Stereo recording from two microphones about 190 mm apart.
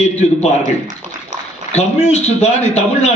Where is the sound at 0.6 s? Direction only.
45° right (ahead or behind).